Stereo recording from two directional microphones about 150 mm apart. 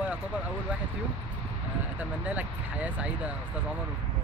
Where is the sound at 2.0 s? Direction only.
10° right (ahead or behind).